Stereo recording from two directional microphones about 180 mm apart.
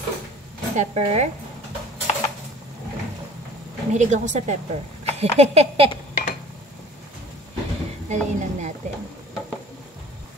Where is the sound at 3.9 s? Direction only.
40° right (ahead or behind).